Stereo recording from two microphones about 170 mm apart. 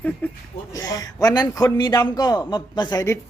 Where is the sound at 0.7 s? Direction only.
20° left (ahead or behind).